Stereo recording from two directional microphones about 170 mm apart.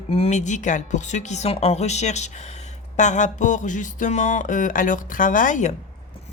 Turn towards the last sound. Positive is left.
turn(degrees=45)  # may be behind; listen again after turning